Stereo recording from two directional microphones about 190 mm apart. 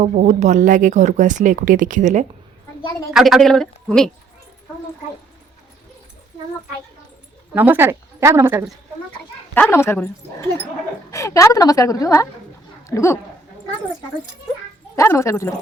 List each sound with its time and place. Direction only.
0.0 s speech: 40° right (ahead or behind)
3.1 s a woman's voice: centre (ahead or behind)
7.5 s a woman's voice: 10° right (ahead or behind)
9.6 s a woman's voice: 10° left (ahead or behind)
14.9 s a woman's voice: 15° left (ahead or behind)